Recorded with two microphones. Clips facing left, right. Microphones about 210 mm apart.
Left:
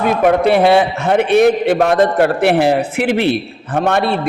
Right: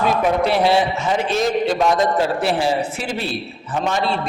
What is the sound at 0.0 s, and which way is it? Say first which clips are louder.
A man's voice: left 5 dB; 55° left (ahead or behind).